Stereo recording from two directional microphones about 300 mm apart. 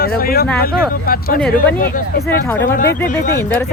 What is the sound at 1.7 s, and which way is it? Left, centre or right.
Speech, left.